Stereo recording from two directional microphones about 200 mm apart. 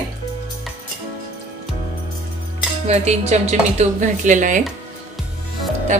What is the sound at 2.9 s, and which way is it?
A woman's voice, 35° right (ahead or behind).